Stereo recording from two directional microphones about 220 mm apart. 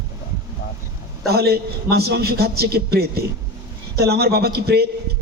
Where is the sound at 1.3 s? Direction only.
45° right (ahead or behind).